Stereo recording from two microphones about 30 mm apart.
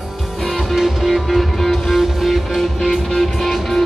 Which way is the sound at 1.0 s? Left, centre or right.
Centre.